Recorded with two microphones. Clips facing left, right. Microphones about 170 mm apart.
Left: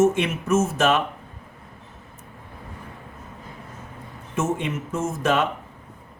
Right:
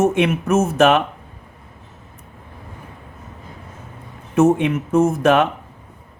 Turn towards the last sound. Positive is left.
turn(degrees=-60)  # may be behind; listen again after turning